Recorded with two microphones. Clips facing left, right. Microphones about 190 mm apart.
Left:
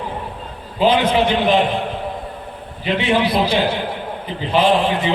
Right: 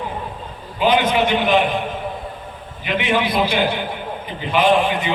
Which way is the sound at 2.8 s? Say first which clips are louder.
Left 2 dB; 30° left (ahead or behind).